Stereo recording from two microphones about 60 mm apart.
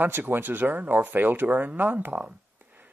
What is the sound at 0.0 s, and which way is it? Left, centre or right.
Speech, right.